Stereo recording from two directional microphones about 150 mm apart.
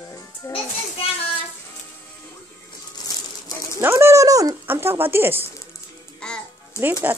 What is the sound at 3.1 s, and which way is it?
Rattle, 25° left (ahead or behind).